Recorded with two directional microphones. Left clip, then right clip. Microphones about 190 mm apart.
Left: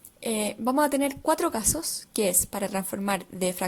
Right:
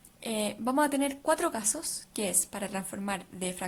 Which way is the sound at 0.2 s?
25° left (ahead or behind).